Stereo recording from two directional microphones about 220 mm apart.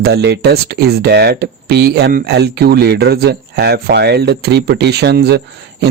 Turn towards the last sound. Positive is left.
turn(degrees=-45)  # may be behind; listen again after turning